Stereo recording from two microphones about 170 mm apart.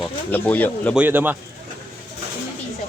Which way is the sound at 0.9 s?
10° right (ahead or behind).